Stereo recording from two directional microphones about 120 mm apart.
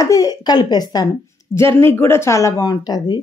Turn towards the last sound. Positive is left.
turn(degrees=35)  # may be behind; listen again after turning